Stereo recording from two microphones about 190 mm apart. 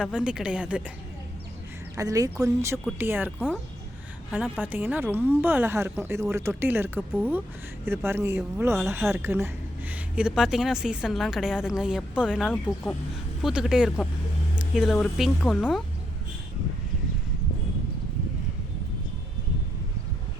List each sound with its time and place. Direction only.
0.0 s a woman's voice: 5° right (ahead or behind)
2.0 s a woman's voice: 20° right (ahead or behind); by 15.8 s centre (ahead or behind)